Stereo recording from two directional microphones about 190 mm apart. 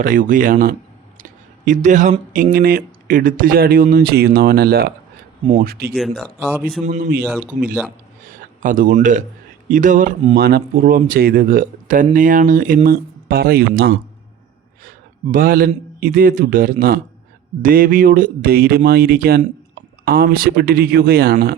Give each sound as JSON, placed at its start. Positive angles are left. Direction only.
{"t": 0.0, "sound": "speech", "side_deg": -45}
{"t": 1.2, "sound": "a sound", "side_deg": -40}
{"t": 2.3, "sound": "speech", "side_deg": -45}
{"t": 5.5, "sound": "speech", "side_deg": -40}
{"t": 5.9, "sound": "speech", "side_deg": 0}
{"t": 6.8, "sound": "speech", "side_deg": -40}
{"t": 8.2, "sound": "a man's voice", "side_deg": -45}